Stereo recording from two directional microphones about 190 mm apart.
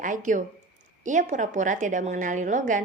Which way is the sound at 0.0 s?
40° right (ahead or behind).